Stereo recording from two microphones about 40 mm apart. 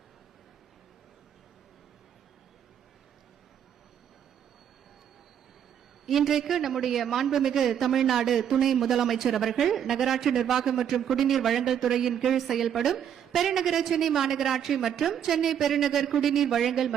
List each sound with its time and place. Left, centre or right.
6.1 s a man's voice: centre